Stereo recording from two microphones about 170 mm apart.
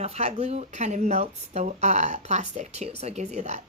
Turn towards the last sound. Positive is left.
turn(degrees=-40)  # may be behind; listen again after turning